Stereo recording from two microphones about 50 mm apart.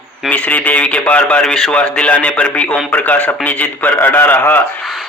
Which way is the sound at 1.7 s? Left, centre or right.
Left.